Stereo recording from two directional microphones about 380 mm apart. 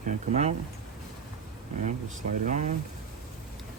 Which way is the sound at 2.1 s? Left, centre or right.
Centre.